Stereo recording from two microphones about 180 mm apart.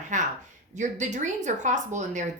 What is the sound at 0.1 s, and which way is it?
A woman's voice, 45° right (ahead or behind).